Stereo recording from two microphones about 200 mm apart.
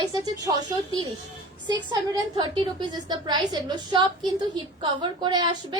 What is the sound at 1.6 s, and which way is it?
A woman's voice, 20° right (ahead or behind).